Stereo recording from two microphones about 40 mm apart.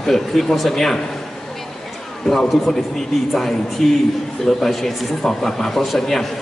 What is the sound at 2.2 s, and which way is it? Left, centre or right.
Speech, centre.